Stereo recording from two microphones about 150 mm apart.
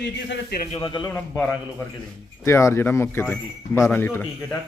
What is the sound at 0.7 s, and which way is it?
Speech, 35° left (ahead or behind).